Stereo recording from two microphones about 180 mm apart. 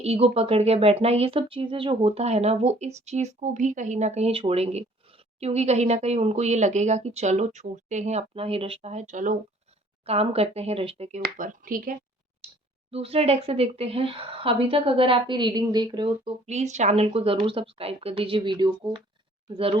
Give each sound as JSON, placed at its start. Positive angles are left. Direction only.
{"t": 0.0, "sound": "speech", "side_deg": -35}
{"t": 10.1, "sound": "speech", "side_deg": -35}
{"t": 11.2, "sound": "speech", "side_deg": -50}
{"t": 12.4, "sound": "clicking", "side_deg": -35}
{"t": 12.9, "sound": "speech", "side_deg": -35}
{"t": 16.5, "sound": "speech", "side_deg": -40}